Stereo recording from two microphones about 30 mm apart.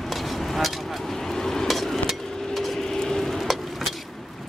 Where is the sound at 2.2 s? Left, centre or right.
Centre.